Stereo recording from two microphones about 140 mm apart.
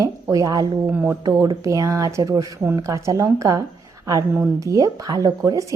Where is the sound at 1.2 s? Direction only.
25° right (ahead or behind).